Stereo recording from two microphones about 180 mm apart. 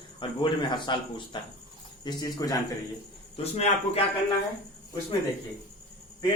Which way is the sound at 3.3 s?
35° left (ahead or behind).